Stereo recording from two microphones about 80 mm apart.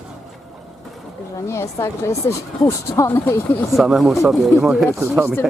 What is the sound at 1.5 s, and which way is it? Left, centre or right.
A woman's voice, left.